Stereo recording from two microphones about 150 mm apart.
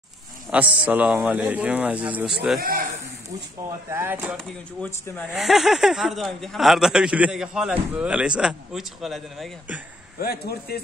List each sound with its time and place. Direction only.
0.5 s a man's voice: 10° right (ahead or behind)
2.6 s speech: 75° right (ahead or behind)
3.9 s a man's voice: 15° right (ahead or behind)
5.3 s speech: centre (ahead or behind)
10.1 s speech: 90° left